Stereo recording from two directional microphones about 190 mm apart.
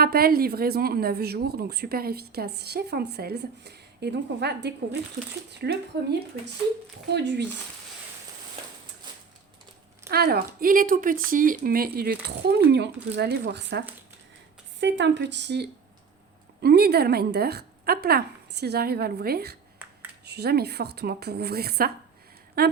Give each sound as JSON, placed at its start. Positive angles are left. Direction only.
{"t": 0.0, "sound": "speech", "side_deg": -55}
{"t": 10.1, "sound": "speech", "side_deg": -55}